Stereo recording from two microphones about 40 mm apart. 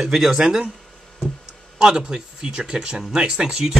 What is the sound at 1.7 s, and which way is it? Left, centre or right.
Speech, centre.